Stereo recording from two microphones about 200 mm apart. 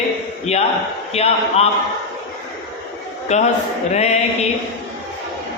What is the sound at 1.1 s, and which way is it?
Speech, 30° left (ahead or behind).